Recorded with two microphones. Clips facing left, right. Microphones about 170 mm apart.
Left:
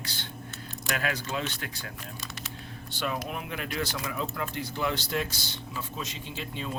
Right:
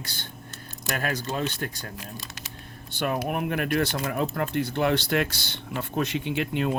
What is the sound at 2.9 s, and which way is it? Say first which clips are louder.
Speech: right 6 dB; 55° right (ahead or behind).